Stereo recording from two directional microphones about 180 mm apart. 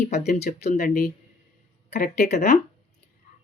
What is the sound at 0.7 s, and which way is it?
Speech, 60° left (ahead or behind).